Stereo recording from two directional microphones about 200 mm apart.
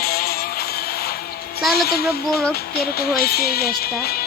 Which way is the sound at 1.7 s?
50° left (ahead or behind).